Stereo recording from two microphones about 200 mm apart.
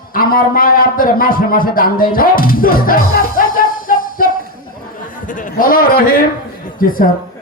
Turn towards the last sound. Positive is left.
turn(degrees=45)  # may be behind; listen again after turning